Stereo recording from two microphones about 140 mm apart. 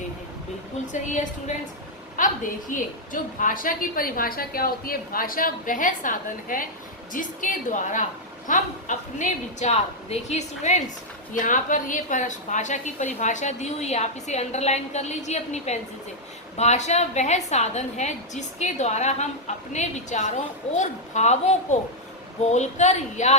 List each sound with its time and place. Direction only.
2.1 s a woman's voice: 70° left (ahead or behind)
11.3 s a woman's voice: 70° left (ahead or behind)